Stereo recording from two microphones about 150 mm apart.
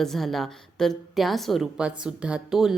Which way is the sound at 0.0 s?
Centre (ahead or behind).